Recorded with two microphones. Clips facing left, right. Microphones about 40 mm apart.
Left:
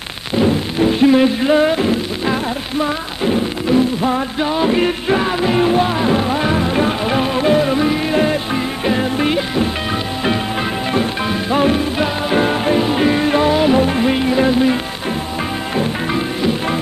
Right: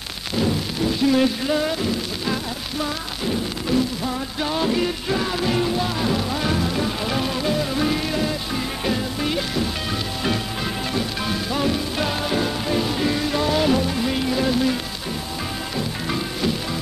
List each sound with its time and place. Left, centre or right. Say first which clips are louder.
0.4 s music: left 8 dB; left
4.7 s music: left 7 dB; left
7.8 s music: left 6 dB; left
8.8 s music: left 8 dB; left
10.9 s music: left 7 dB; left
13.7 s music: left 8 dB; left